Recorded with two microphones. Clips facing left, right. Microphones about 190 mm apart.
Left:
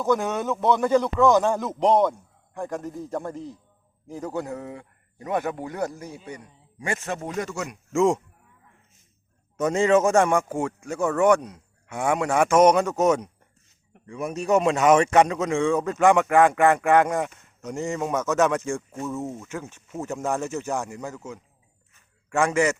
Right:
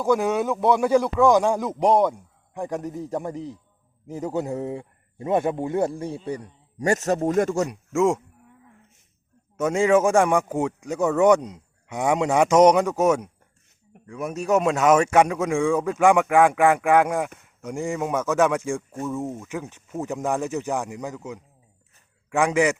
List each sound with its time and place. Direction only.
0.0 s a man's voice: 10° right (ahead or behind); by 7.7 s 50° right (ahead or behind)
7.9 s a man's voice: 5° right (ahead or behind)
9.6 s a man's voice: 10° right (ahead or behind)